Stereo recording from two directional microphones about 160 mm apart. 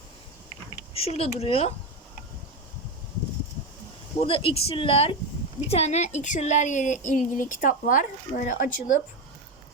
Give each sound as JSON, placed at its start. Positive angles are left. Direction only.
{"t": 0.9, "sound": "speech", "side_deg": 40}
{"t": 4.2, "sound": "a woman's voice", "side_deg": 35}